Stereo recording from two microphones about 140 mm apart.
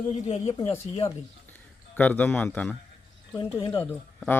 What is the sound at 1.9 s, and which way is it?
Speech, 10° left (ahead or behind).